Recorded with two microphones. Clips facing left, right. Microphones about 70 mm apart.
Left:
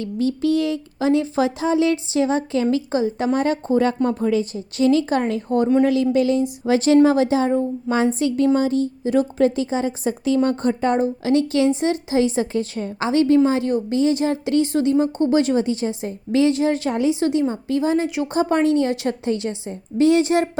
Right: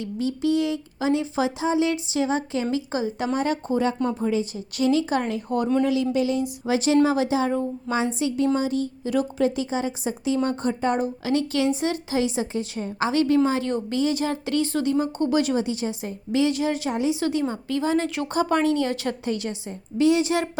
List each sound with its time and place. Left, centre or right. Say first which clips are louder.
0.0 s speech: left 4 dB; left
3.8 s speech: left 4 dB; left
5.8 s speech: left 5 dB; left
10.1 s speech: left 5 dB; left
10.9 s a woman's voice: left 5 dB; left
12.4 s speech: left 5 dB; left
13.1 s a woman's voice: left 5 dB; left